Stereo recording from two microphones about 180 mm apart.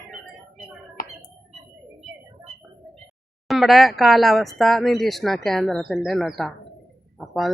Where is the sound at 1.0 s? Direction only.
50° left (ahead or behind).